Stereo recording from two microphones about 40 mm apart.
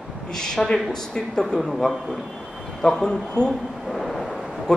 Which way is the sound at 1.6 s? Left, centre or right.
Centre.